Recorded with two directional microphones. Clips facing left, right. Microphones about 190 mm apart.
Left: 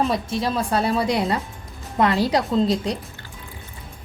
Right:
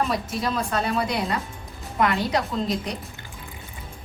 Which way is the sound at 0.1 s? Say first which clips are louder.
Left 3 dB; 30° left (ahead or behind).